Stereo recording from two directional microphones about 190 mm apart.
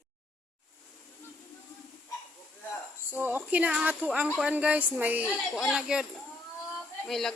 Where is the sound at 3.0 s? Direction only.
10° right (ahead or behind).